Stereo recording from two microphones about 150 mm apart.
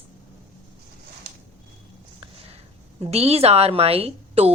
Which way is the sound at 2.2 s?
40° right (ahead or behind).